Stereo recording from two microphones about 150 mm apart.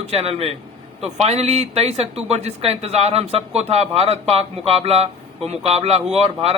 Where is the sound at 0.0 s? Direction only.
45° right (ahead or behind).